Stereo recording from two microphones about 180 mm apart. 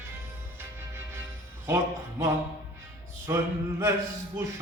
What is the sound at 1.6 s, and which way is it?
Speech, 15° right (ahead or behind).